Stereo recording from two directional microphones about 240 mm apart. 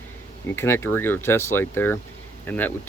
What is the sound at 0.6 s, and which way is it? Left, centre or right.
Speech, centre.